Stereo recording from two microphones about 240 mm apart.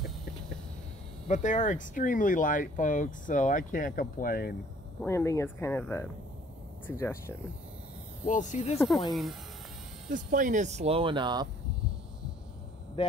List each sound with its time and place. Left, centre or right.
1.2 s speech: left
5.0 s speech: centre
8.3 s speech: left
8.7 s speech: centre
10.1 s speech: right